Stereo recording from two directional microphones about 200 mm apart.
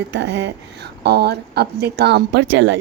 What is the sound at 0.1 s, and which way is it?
A woman's voice, 60° right (ahead or behind).